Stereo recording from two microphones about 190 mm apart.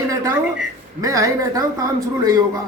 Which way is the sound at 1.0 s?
15° right (ahead or behind).